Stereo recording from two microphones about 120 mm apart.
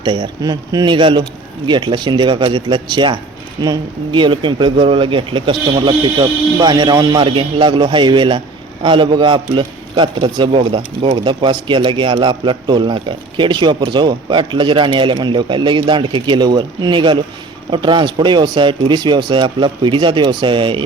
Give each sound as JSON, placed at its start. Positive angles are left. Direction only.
{"t": 0.0, "sound": "speech", "side_deg": -40}
{"t": 7.7, "sound": "speech", "side_deg": -40}